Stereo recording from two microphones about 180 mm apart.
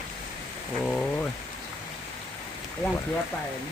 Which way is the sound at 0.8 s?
Centre (ahead or behind).